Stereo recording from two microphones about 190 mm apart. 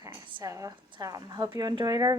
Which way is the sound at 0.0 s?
20° right (ahead or behind).